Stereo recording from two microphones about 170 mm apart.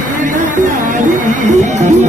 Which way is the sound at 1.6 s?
45° right (ahead or behind).